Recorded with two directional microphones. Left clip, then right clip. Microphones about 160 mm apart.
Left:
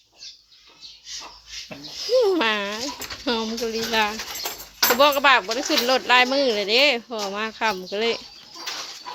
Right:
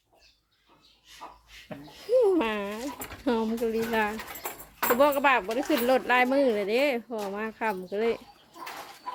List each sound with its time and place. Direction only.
2.0 s a sound: 10° right (ahead or behind)
3.2 s speech: 25° right (ahead or behind)
7.2 s speech: 5° right (ahead or behind)